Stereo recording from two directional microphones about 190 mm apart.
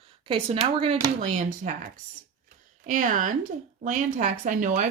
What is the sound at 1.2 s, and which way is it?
A woman's voice, 40° right (ahead or behind).